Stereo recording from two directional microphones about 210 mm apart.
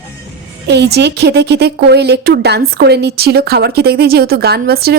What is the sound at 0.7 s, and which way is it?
A woman's voice, 55° right (ahead or behind).